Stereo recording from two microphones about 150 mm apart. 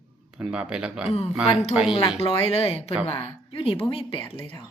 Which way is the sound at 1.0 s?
45° left (ahead or behind).